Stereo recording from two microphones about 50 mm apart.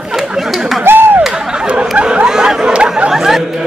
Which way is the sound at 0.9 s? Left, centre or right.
Right.